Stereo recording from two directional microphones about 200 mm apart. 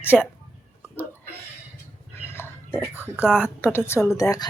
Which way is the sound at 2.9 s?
10° right (ahead or behind).